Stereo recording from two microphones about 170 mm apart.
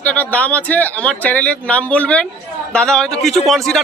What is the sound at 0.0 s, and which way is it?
A man's voice, 10° left (ahead or behind).